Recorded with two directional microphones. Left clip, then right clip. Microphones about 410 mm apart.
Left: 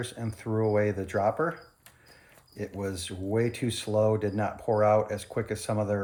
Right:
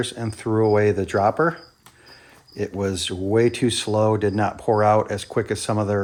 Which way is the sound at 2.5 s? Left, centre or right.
Right.